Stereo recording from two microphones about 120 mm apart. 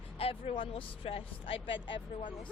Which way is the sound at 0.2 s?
55° left (ahead or behind).